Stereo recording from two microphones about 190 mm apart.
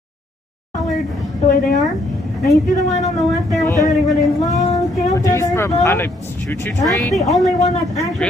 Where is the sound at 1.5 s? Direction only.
45° left (ahead or behind).